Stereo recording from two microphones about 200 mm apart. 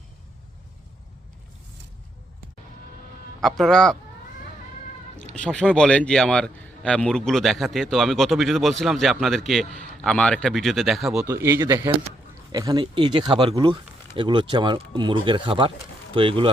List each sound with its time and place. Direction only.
3.4 s a man's voice: centre (ahead or behind)
5.3 s a man's voice: 5° left (ahead or behind)
11.3 s speech: 15° right (ahead or behind)